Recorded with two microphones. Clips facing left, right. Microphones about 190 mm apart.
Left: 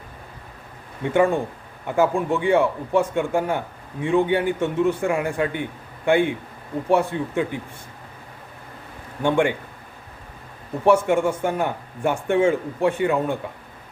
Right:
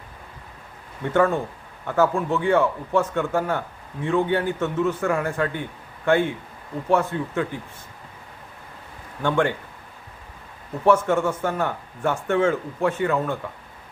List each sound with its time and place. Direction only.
1.0 s speech: 10° left (ahead or behind)
9.2 s speech: 15° left (ahead or behind)
10.8 s speech: 15° left (ahead or behind)